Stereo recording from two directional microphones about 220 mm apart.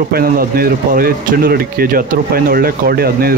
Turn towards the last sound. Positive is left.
turn(degrees=-45)  # may be behind; listen again after turning